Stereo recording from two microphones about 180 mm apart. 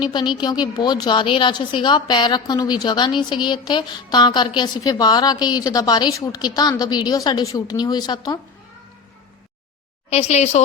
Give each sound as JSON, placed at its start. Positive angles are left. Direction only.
{"t": 0.0, "sound": "a woman's voice", "side_deg": 25}
{"t": 10.1, "sound": "a woman's voice", "side_deg": 35}